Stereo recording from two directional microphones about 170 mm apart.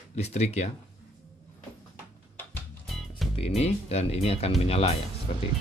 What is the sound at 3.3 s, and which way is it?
Speech, 40° left (ahead or behind).